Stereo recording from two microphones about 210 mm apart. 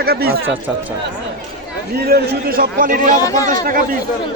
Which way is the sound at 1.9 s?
45° right (ahead or behind).